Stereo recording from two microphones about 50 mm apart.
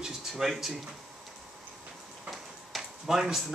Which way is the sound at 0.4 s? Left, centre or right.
Centre.